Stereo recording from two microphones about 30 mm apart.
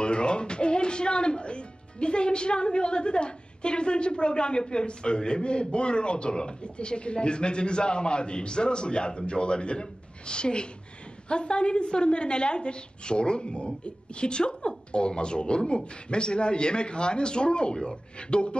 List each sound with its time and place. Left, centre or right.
0.0 s speech: left